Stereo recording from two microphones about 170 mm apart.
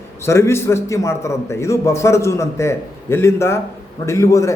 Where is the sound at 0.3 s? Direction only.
15° left (ahead or behind).